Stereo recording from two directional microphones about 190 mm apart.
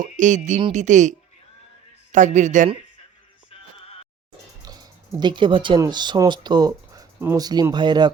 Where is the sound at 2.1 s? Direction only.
40° right (ahead or behind).